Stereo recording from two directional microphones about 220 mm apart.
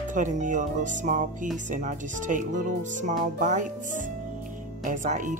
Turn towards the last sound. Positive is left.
turn(degrees=-35)  # may be behind; listen again after turning